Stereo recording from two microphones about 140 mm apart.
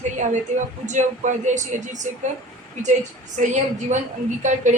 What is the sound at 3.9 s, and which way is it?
Speech, 60° right (ahead or behind).